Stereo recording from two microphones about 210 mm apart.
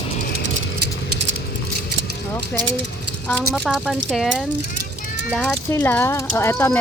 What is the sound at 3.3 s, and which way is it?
Speech, centre (ahead or behind).